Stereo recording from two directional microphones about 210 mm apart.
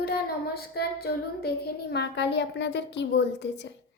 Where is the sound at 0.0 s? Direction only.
50° left (ahead or behind).